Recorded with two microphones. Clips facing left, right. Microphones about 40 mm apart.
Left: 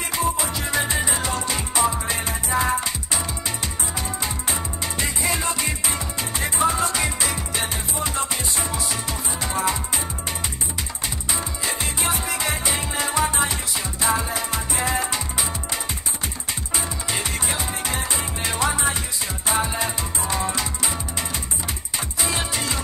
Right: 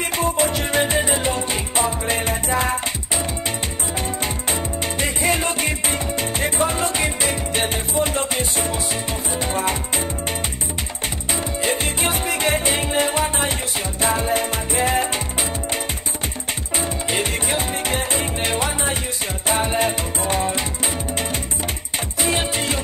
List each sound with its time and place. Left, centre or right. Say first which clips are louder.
0.2 s music: right 4 dB; right
5.0 s music: right 4 dB; right
11.6 s music: right 4 dB; right
16.7 s music: right 5 dB; right
22.2 s music: right 4 dB; right